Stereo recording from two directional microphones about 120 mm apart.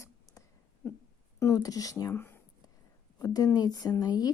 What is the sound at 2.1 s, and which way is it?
Speech, 15° left (ahead or behind).